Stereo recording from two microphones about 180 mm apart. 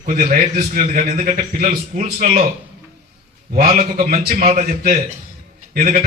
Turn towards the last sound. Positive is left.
turn(degrees=-40)  # may be behind; listen again after turning